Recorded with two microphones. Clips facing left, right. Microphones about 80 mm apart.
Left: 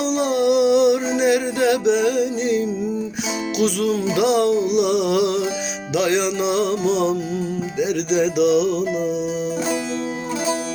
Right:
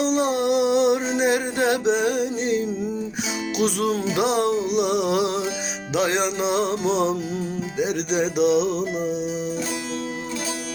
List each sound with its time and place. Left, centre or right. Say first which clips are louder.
0.0 s music: left 2 dB; right